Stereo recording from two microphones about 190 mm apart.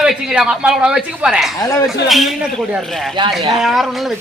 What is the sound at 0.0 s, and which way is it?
A man's voice, 5° right (ahead or behind).